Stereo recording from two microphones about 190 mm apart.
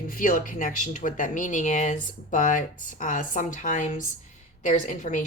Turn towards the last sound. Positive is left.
turn(degrees=40)  # may be behind; listen again after turning